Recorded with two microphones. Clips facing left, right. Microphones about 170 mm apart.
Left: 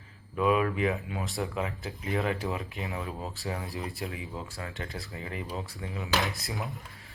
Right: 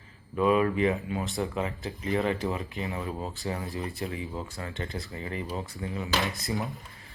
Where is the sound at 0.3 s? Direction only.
5° left (ahead or behind).